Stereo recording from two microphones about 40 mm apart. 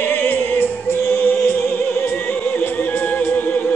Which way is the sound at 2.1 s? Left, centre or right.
Left.